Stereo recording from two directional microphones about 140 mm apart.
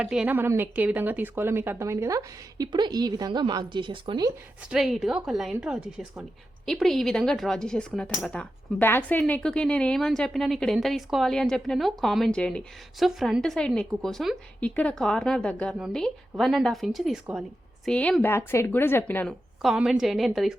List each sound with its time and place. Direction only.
0.0 s a woman's voice: 5° right (ahead or behind); by 4.3 s 35° right (ahead or behind)
4.6 s a woman's voice: 5° right (ahead or behind); by 19.3 s 15° left (ahead or behind)
19.6 s speech: 5° right (ahead or behind)